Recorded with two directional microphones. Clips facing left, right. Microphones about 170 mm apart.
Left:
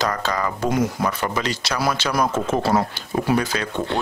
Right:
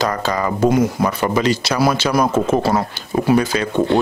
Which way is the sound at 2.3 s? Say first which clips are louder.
Right 5 dB; 45° right (ahead or behind).